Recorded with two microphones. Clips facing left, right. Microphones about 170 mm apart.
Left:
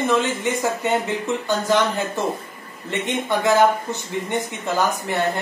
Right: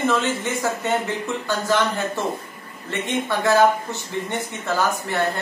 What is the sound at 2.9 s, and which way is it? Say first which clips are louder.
Speech: left 1 dB; 20° left (ahead or behind).